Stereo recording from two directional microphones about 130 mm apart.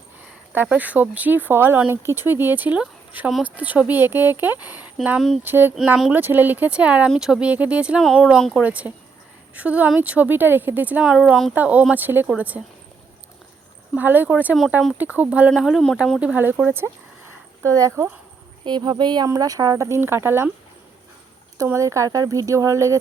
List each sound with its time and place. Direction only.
0.5 s speech: 15° right (ahead or behind)
5.4 s speech: 15° right (ahead or behind)
5.7 s speech: 5° right (ahead or behind)
13.9 s speech: 15° right (ahead or behind)
16.2 s speech: 15° right (ahead or behind)
18.6 s speech: 35° right (ahead or behind); by 20.5 s 20° right (ahead or behind)
21.6 s speech: 25° right (ahead or behind)